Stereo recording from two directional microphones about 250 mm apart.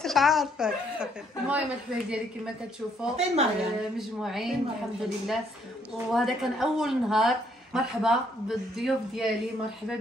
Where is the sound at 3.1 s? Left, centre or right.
Right.